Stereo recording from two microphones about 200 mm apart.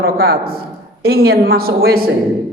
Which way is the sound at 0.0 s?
50° right (ahead or behind).